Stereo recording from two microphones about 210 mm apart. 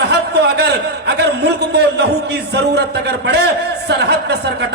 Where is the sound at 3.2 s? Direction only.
50° right (ahead or behind).